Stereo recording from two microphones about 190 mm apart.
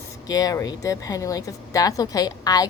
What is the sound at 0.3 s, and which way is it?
A woman's voice, 20° left (ahead or behind).